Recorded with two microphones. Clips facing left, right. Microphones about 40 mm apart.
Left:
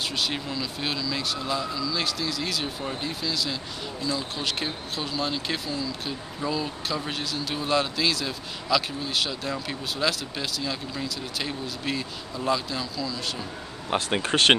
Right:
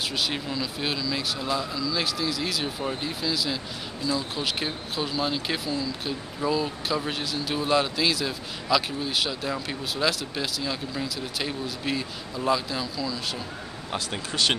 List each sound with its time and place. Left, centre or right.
0.1 s speech: centre
13.9 s speech: left